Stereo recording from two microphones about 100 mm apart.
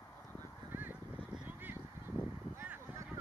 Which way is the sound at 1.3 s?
15° right (ahead or behind).